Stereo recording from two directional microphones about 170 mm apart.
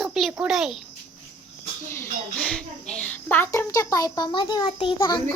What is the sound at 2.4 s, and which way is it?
A child's voice, 5° left (ahead or behind).